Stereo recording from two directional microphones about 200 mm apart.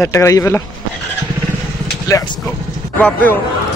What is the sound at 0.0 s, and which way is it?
Speech, 15° left (ahead or behind).